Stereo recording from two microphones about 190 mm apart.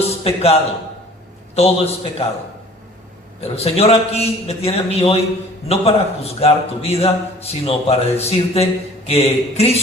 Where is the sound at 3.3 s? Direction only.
35° left (ahead or behind).